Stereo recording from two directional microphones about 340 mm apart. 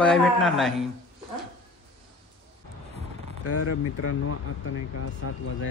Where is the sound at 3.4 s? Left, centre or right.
Left.